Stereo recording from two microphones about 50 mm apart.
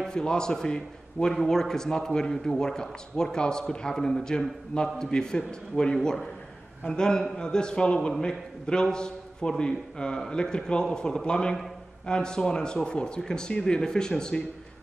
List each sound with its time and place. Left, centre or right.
0.0 s a man's voice: centre